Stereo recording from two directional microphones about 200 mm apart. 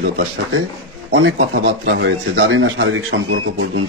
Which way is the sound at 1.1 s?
65° right (ahead or behind).